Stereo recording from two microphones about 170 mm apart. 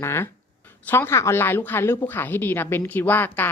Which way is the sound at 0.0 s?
15° left (ahead or behind).